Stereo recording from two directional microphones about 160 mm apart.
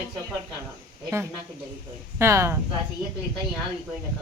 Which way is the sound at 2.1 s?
15° right (ahead or behind).